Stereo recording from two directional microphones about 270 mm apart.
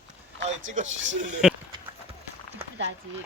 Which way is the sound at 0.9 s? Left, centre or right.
Right.